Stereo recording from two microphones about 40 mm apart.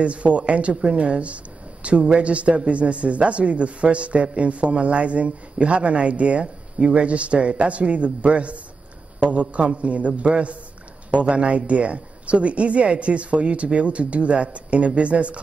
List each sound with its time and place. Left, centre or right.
0.0 s speech: right